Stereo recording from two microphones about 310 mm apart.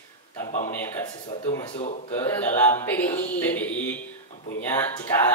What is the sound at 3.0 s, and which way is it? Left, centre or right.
A woman's voice, centre.